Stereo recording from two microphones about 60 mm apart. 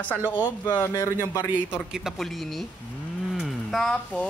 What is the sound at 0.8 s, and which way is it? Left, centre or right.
Speech, left.